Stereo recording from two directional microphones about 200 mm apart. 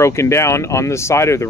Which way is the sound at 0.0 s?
15° left (ahead or behind).